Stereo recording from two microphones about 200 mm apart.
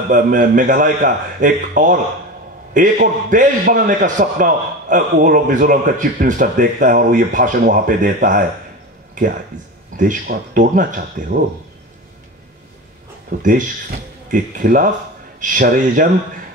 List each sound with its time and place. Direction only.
0.1 s a man's voice: 40° right (ahead or behind)
13.4 s a man's voice: 40° right (ahead or behind)